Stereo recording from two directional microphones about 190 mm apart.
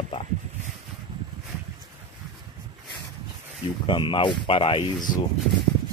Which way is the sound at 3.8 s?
25° left (ahead or behind).